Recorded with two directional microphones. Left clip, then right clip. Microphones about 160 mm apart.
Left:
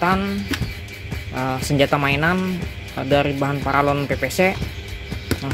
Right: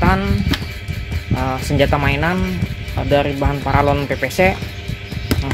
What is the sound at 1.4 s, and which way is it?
Speech, 20° left (ahead or behind).